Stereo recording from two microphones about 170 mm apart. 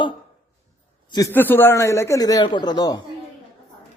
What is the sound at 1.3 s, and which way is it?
A man's voice, 10° left (ahead or behind).